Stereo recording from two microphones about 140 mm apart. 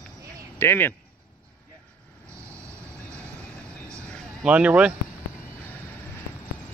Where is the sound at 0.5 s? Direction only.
15° left (ahead or behind).